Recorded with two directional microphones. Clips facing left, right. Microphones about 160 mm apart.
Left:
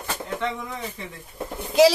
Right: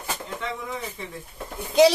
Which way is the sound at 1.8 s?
Centre (ahead or behind).